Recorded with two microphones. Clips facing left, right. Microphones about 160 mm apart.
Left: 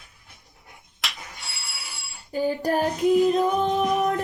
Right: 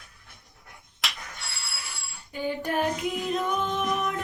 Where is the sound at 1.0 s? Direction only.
Centre (ahead or behind).